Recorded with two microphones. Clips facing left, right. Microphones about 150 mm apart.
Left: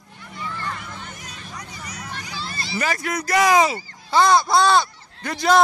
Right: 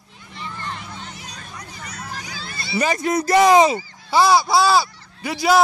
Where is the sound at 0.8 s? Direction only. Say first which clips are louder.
Right 1 dB; 55° left (ahead or behind).